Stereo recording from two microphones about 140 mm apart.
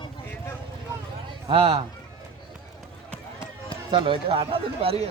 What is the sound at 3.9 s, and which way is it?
Speech, 40° right (ahead or behind).